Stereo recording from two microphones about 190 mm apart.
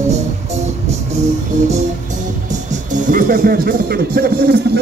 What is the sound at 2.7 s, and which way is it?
Speech, 45° right (ahead or behind).